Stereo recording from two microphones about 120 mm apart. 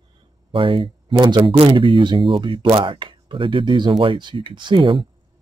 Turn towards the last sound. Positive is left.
turn(degrees=-45)  # may be behind; listen again after turning